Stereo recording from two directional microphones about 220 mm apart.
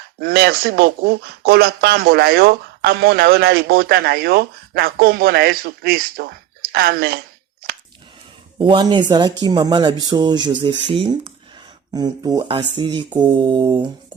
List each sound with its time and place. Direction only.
0.2 s speech: 45° right (ahead or behind)
8.5 s speech: 20° right (ahead or behind)